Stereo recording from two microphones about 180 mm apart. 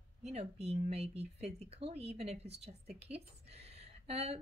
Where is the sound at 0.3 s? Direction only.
35° right (ahead or behind).